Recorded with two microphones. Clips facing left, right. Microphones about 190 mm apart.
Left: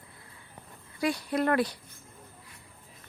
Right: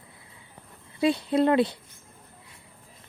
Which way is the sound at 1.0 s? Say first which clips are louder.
Right 6 dB; 25° right (ahead or behind).